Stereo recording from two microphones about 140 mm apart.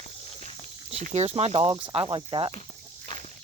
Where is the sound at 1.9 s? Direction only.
40° right (ahead or behind).